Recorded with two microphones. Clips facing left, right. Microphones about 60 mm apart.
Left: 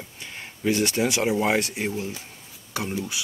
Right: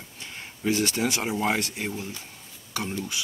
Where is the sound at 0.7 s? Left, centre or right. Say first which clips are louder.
Left 3 dB; left.